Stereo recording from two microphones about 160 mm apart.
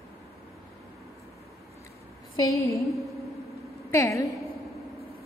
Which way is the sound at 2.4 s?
20° left (ahead or behind).